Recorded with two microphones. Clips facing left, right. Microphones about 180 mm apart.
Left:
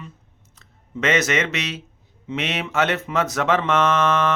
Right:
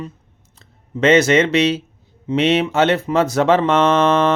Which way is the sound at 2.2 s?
30° right (ahead or behind).